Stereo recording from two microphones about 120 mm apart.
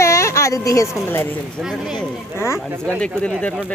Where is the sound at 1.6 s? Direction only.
5° right (ahead or behind).